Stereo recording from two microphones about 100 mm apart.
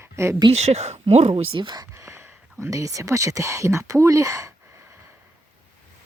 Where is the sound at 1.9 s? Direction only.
30° right (ahead or behind).